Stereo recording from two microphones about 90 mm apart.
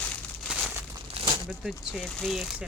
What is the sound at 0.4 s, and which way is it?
Crumpling, 5° right (ahead or behind).